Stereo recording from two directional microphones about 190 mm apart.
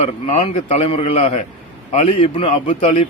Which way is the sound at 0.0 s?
30° left (ahead or behind).